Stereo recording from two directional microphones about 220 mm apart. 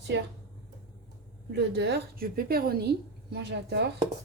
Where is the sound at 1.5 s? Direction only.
50° right (ahead or behind).